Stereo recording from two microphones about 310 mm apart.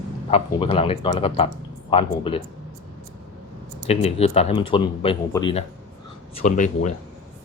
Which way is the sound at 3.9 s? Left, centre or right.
Centre.